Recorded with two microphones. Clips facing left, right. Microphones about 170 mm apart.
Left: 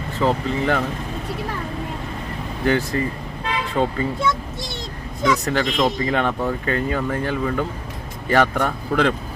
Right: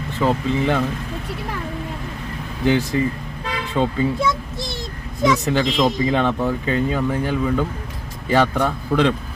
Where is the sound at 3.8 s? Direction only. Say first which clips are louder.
Right 1 dB; 10° left (ahead or behind).